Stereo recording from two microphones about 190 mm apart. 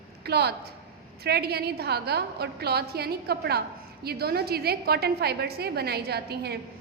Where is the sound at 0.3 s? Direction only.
60° right (ahead or behind).